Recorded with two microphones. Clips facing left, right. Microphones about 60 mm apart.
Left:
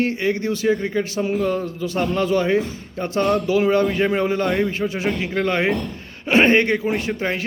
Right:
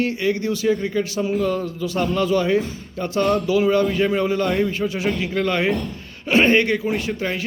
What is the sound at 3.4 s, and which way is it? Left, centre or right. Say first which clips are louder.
A man's voice: even; left.